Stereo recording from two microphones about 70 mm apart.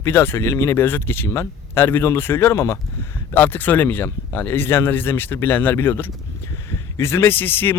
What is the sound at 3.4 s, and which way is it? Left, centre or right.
Speech, left.